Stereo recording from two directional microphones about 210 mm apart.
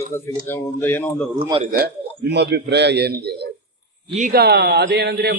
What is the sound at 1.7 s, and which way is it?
A man's voice, 45° right (ahead or behind).